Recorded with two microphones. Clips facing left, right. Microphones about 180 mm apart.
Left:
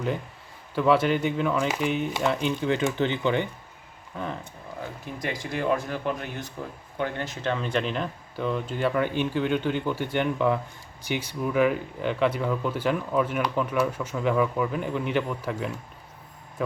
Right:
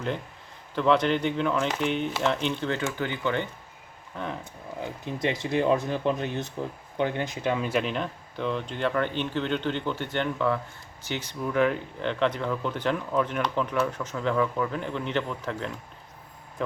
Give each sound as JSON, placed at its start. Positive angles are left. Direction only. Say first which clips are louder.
{"t": 0.8, "sound": "speech", "louder": "left 1 dB", "side_deg": 5}
{"t": 4.1, "sound": "speech", "louder": "left 1 dB", "side_deg": 0}
{"t": 4.8, "sound": "speech", "louder": "right 4 dB", "side_deg": -20}